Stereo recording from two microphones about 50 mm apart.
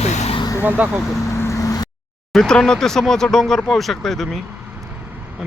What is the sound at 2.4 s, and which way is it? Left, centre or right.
Speech, centre.